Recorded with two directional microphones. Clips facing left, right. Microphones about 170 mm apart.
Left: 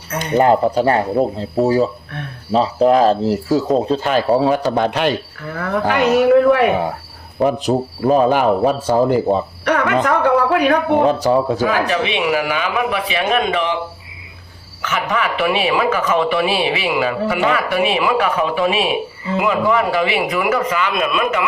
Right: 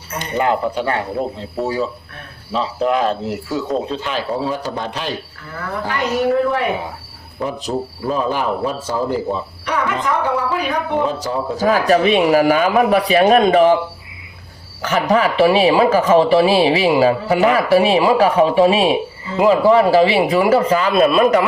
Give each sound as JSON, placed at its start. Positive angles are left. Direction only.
{"t": 0.3, "sound": "speech", "side_deg": 40}
{"t": 4.3, "sound": "speech", "side_deg": 65}
{"t": 8.0, "sound": "speech", "side_deg": 60}
{"t": 11.6, "sound": "speech", "side_deg": -40}
{"t": 14.8, "sound": "speech", "side_deg": -35}